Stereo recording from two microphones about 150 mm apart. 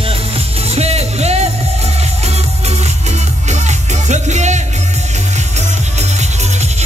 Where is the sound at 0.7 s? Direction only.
45° right (ahead or behind).